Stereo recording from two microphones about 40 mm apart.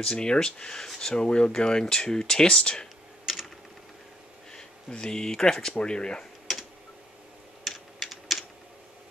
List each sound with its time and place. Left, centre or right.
0.0 s speech: left
3.3 s typing: centre
4.5 s a sound: centre
4.9 s speech: centre
7.6 s typing: centre